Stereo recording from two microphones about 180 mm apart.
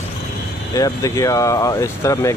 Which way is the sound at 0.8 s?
20° left (ahead or behind).